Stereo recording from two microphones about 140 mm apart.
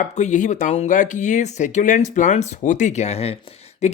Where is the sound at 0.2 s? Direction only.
60° left (ahead or behind).